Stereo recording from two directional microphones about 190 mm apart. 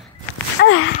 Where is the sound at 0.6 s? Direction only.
80° left.